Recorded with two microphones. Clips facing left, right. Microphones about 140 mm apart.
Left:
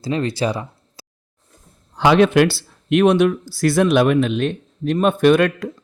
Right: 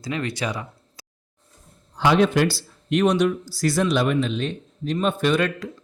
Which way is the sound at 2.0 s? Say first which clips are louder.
Left 5 dB; 75° left (ahead or behind).